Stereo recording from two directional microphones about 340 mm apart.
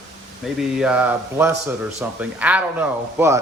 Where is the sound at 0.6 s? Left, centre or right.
Centre.